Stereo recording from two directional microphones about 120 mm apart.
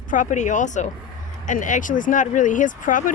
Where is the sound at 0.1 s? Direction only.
90° left.